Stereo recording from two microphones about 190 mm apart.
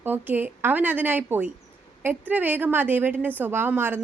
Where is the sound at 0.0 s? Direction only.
10° right (ahead or behind).